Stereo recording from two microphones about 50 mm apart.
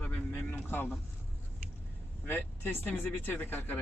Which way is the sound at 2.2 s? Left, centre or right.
Left.